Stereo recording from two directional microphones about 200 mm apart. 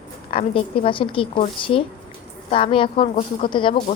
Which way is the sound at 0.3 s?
30° left (ahead or behind).